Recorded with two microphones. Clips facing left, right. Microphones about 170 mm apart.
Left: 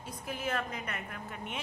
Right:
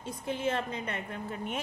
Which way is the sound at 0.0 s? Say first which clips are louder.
Right 5 dB; 25° right (ahead or behind).